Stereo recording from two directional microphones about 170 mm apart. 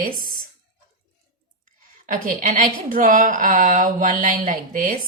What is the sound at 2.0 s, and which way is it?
A woman's voice, 50° right (ahead or behind).